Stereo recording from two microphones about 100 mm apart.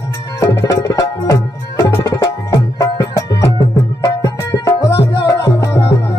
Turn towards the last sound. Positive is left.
turn(degrees=30)  # may be behind; listen again after turning